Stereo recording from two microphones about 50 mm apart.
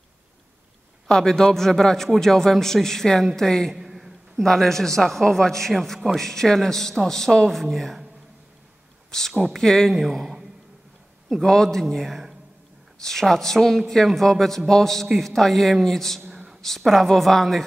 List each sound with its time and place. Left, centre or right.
1.0 s a man's voice: centre
3.7 s a sound: centre
4.4 s a man's voice: centre
7.4 s a man's voice: centre
9.4 s a man's voice: centre
9.9 s a man's voice: centre
11.4 s a man's voice: centre
16.3 s a sound: centre
16.6 s a man's voice: centre